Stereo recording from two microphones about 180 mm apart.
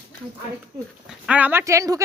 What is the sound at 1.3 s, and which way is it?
Speech, 10° right (ahead or behind).